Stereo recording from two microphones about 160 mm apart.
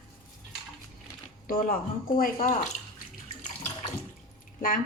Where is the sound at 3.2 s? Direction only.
45° left (ahead or behind).